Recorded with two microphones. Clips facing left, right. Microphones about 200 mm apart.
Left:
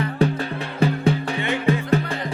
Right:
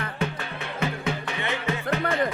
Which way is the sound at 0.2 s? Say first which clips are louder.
Left 10 dB; 35° left (ahead or behind).